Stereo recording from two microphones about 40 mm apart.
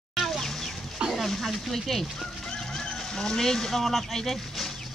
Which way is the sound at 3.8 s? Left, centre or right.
Centre.